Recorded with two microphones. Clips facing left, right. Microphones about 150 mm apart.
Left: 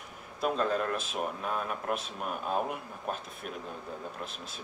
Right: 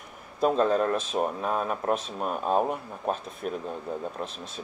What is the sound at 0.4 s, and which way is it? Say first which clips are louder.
Speech: right 7 dB; 35° right (ahead or behind).